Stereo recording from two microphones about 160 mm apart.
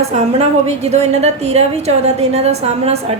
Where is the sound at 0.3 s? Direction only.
45° right (ahead or behind).